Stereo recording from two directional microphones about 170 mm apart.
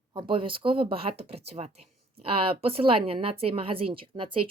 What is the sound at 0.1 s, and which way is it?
Speech, 30° right (ahead or behind).